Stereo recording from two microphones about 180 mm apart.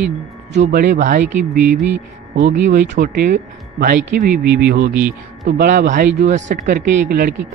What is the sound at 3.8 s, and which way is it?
Speech, 50° right (ahead or behind).